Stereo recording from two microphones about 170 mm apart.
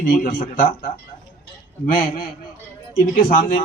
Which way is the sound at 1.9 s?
55° left (ahead or behind).